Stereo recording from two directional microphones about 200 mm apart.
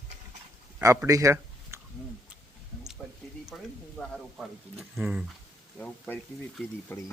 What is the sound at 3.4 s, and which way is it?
Speech, centre (ahead or behind).